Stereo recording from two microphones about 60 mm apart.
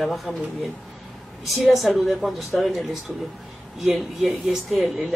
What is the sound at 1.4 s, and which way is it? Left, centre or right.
A man's voice, centre.